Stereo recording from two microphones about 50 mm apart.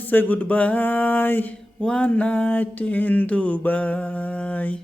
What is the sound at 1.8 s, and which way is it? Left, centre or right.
Mantra, left.